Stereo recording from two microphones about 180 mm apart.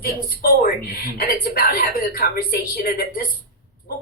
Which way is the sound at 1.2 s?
55° left (ahead or behind).